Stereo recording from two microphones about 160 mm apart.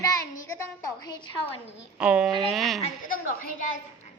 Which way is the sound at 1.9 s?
5° right (ahead or behind).